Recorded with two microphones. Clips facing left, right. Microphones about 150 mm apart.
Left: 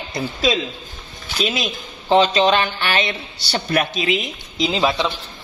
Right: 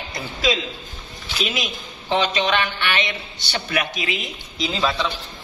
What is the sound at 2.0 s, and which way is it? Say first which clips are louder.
A man's voice: left 6 dB; 30° left (ahead or behind).